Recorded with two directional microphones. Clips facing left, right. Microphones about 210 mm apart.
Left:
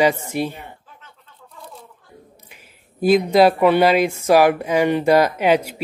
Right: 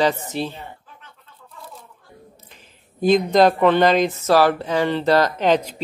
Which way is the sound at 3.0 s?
10° left (ahead or behind).